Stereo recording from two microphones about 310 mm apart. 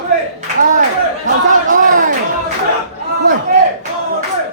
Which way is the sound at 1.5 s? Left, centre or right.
Right.